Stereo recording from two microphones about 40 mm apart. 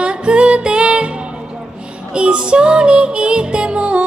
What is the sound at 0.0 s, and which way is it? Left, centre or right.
Music, right.